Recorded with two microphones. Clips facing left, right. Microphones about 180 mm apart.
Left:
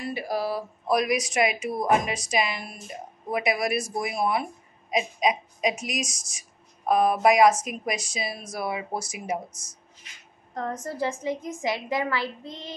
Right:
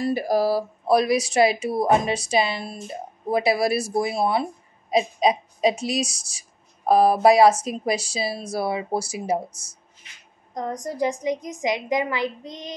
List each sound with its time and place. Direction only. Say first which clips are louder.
0.0 s speech: right 7 dB; 40° right (ahead or behind)
10.5 s a woman's voice: right 2 dB; 15° right (ahead or behind)